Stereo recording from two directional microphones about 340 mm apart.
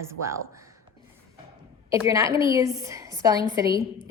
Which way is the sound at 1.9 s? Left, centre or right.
Centre.